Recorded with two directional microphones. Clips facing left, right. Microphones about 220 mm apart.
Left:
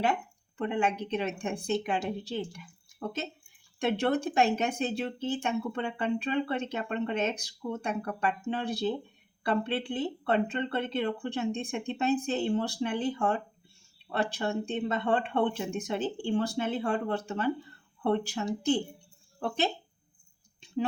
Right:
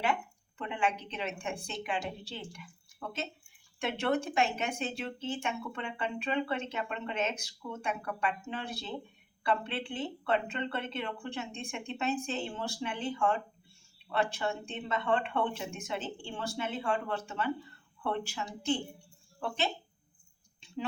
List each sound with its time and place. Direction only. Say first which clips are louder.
0.5 s speech: left 5 dB; 40° left (ahead or behind)
3.8 s speech: left 4 dB; 35° left (ahead or behind)